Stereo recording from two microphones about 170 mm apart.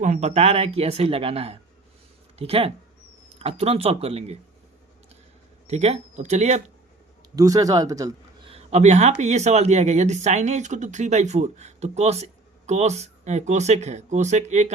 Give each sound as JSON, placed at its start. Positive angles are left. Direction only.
{"t": 0.0, "sound": "speech", "side_deg": -45}
{"t": 5.6, "sound": "speech", "side_deg": -40}
{"t": 7.3, "sound": "speech", "side_deg": -20}
{"t": 8.4, "sound": "speech", "side_deg": -40}